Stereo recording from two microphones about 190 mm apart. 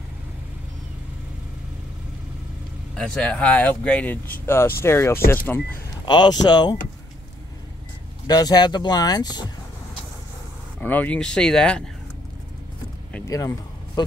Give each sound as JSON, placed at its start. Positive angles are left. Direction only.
{"t": 2.9, "sound": "speech", "side_deg": 5}
{"t": 6.0, "sound": "speech", "side_deg": 20}
{"t": 8.3, "sound": "speech", "side_deg": 20}
{"t": 10.8, "sound": "speech", "side_deg": 10}
{"t": 13.3, "sound": "a sound", "side_deg": 15}